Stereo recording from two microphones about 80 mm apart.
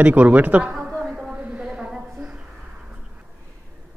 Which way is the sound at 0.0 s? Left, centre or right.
Centre.